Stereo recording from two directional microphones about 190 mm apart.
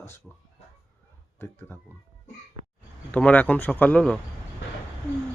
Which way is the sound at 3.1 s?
10° left (ahead or behind).